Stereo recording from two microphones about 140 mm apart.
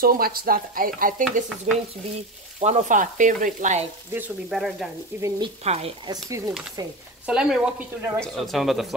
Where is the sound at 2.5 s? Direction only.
55° right (ahead or behind).